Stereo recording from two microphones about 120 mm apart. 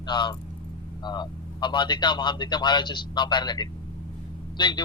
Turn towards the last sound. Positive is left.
turn(degrees=40)  # may be behind; listen again after turning